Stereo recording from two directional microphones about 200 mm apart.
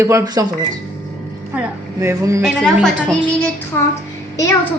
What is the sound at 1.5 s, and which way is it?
Speech, 10° right (ahead or behind).